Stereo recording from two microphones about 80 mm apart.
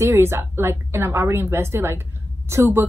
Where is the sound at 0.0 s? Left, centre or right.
Right.